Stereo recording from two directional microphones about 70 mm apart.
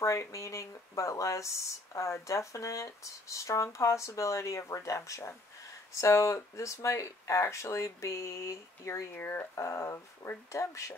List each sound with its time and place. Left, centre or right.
0.0 s speech: left
9.1 s speech: left
9.6 s speech: left